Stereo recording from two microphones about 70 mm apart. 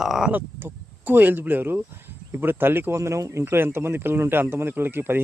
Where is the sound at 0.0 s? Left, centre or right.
Centre.